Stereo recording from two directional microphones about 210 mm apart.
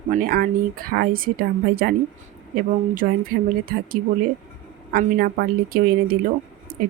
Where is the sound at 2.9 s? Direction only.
40° right (ahead or behind).